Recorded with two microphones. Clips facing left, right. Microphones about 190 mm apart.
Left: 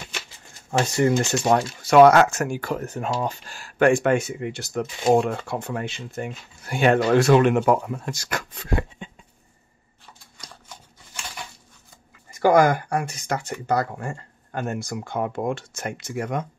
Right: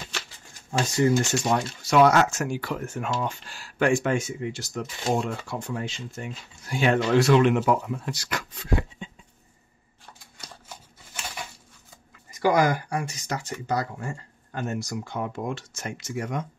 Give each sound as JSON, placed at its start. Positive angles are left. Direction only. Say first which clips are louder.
{"t": 0.7, "sound": "speech", "louder": "left 2 dB", "side_deg": 60}
{"t": 9.0, "sound": "a sound", "louder": "left 1 dB", "side_deg": 60}
{"t": 12.3, "sound": "speech", "louder": "left 5 dB", "side_deg": 50}